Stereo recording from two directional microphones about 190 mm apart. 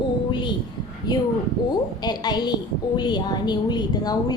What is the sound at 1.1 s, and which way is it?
A woman's voice, 20° left (ahead or behind).